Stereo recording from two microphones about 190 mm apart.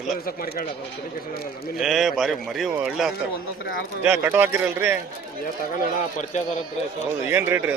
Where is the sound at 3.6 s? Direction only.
55° left (ahead or behind).